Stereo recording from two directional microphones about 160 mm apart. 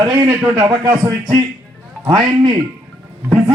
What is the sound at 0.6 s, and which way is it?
A man's voice, 25° right (ahead or behind).